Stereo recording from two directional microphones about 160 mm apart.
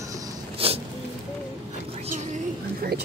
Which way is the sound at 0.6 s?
35° right (ahead or behind).